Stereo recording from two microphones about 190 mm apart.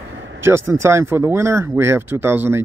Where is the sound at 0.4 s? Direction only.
15° right (ahead or behind).